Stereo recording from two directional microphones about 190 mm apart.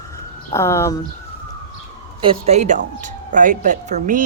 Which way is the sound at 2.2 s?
30° right (ahead or behind).